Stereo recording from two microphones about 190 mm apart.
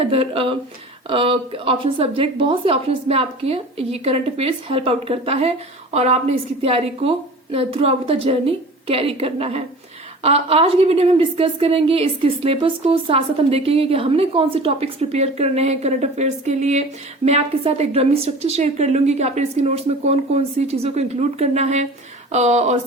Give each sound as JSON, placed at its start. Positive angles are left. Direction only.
{"t": 0.1, "sound": "a woman's voice", "side_deg": -30}